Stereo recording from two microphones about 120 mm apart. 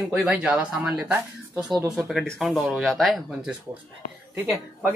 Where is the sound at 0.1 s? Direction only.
5° right (ahead or behind).